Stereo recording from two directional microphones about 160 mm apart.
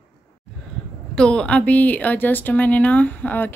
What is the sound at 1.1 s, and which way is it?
Speech, 5° left (ahead or behind).